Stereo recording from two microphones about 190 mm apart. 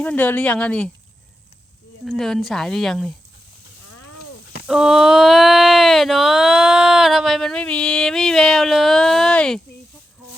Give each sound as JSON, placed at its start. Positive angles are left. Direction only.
{"t": 0.0, "sound": "a woman's voice", "side_deg": 10}
{"t": 2.0, "sound": "speech", "side_deg": 0}
{"t": 4.6, "sound": "speech", "side_deg": 0}